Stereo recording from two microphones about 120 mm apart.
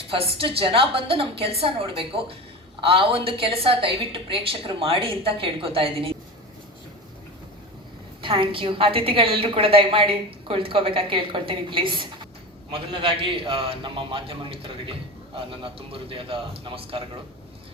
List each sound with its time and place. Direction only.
0.1 s a woman's voice: 50° right (ahead or behind)
8.2 s a woman's voice: 45° right (ahead or behind)